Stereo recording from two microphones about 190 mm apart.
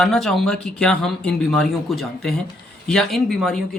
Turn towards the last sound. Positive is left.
turn(degrees=0)  # may be behind; listen again after turning